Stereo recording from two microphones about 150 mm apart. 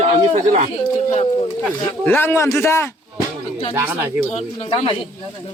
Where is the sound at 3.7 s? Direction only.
15° right (ahead or behind).